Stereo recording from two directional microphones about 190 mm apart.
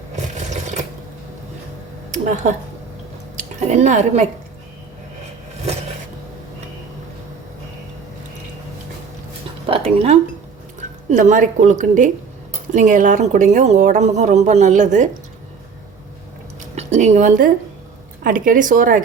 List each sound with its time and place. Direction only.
2.1 s a sound: 40° right (ahead or behind)
3.3 s speech: 35° right (ahead or behind)
9.6 s a woman's voice: 35° right (ahead or behind)
16.7 s a woman's voice: 40° right (ahead or behind)